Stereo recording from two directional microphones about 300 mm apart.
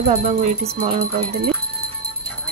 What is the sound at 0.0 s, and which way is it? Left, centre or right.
Speech, right.